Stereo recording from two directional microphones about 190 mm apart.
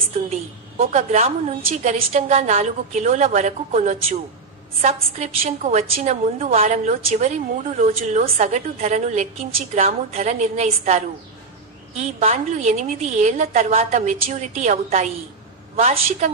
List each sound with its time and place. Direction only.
0.7 s a woman's voice: 35° right (ahead or behind)
12.0 s a woman's voice: 35° right (ahead or behind)